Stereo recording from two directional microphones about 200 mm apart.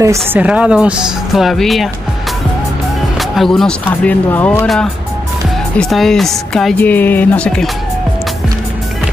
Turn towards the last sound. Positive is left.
turn(degrees=5)  # may be behind; listen again after turning